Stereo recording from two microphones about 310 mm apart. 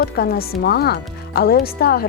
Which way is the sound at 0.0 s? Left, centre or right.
Left.